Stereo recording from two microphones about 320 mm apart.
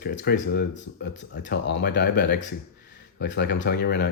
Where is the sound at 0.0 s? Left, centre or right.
Left.